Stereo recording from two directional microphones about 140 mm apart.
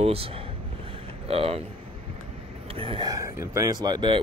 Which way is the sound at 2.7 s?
40° right (ahead or behind).